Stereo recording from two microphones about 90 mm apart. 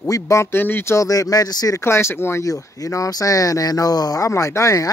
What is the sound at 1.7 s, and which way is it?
Speech, 30° left (ahead or behind).